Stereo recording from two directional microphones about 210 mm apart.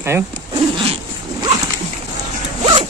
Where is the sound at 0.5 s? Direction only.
25° right (ahead or behind).